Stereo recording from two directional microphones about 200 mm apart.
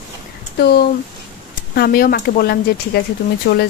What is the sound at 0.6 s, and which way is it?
Speech, 50° left (ahead or behind).